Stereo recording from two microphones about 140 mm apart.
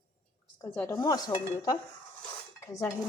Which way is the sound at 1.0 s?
25° left (ahead or behind).